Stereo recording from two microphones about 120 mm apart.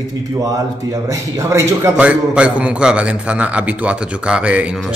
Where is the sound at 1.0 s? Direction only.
25° right (ahead or behind).